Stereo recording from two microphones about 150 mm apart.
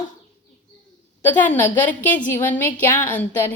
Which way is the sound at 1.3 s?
10° left (ahead or behind).